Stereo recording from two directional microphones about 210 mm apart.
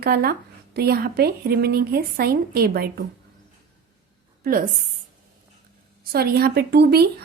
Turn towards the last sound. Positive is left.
turn(degrees=-50)  # may be behind; listen again after turning